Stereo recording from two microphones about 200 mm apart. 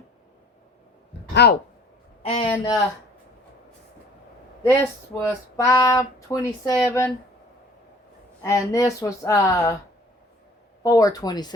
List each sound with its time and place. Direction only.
1.3 s speech: 55° left (ahead or behind)
2.2 s speech: 30° left (ahead or behind)
2.5 s speech: 15° left (ahead or behind)
4.6 s speech: 15° left (ahead or behind)
8.4 s speech: 15° left (ahead or behind)
10.8 s speech: 15° left (ahead or behind)